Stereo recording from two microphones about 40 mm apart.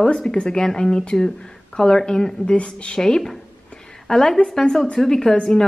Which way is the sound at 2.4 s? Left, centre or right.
Left.